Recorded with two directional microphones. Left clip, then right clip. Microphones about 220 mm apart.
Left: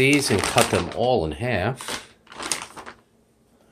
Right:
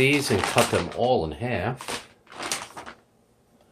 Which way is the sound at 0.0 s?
20° left (ahead or behind).